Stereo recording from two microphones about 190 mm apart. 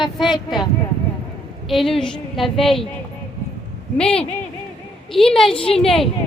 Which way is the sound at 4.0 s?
5° left (ahead or behind).